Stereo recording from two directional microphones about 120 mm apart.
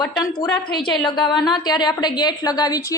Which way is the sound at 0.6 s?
40° left (ahead or behind).